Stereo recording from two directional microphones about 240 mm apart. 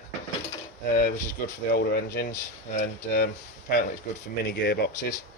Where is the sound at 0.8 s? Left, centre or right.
Left.